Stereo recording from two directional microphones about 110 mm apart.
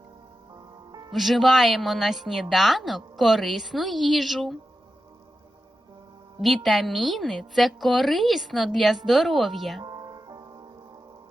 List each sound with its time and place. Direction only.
0.9 s music: 35° right (ahead or behind)
1.1 s a woman's voice: centre (ahead or behind)
6.4 s a woman's voice: centre (ahead or behind)
9.8 s music: 35° right (ahead or behind)